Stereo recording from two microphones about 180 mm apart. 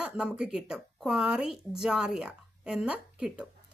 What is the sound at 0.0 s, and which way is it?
A woman's voice, 5° right (ahead or behind).